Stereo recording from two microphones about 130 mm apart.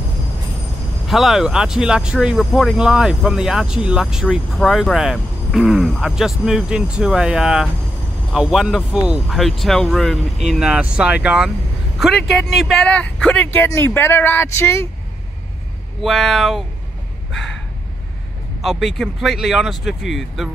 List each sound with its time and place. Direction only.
1.0 s speech: centre (ahead or behind); by 14.9 s 20° left (ahead or behind)
16.0 s speech: centre (ahead or behind)
18.6 s speech: centre (ahead or behind)